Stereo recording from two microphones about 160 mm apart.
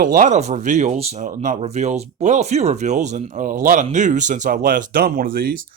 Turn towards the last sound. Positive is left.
turn(degrees=-65)  # may be behind; listen again after turning